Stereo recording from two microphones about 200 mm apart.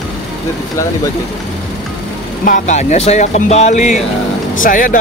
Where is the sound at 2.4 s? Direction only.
40° left (ahead or behind).